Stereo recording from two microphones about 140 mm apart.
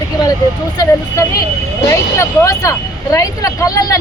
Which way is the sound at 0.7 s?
25° left (ahead or behind).